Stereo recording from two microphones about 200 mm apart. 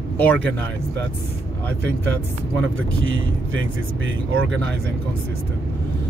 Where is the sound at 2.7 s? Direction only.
75° right (ahead or behind).